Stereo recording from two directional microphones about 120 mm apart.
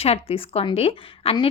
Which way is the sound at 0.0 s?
55° left (ahead or behind).